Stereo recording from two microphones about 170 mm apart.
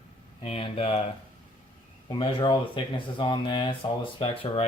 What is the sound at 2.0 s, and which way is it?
Speech, 30° left (ahead or behind).